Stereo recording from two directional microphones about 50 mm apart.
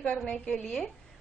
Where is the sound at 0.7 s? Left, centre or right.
Centre.